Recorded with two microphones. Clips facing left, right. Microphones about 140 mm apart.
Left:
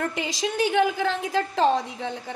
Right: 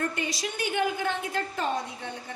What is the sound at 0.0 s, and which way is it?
A woman's voice, 90° left.